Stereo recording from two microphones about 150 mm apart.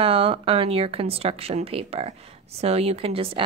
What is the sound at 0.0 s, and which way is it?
Speech, 40° right (ahead or behind).